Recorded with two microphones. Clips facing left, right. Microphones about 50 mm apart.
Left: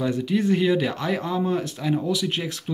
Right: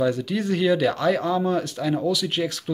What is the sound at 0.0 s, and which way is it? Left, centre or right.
Speech, centre.